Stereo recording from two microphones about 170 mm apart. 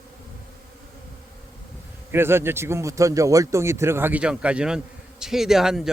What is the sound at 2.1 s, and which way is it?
Speech, 15° right (ahead or behind).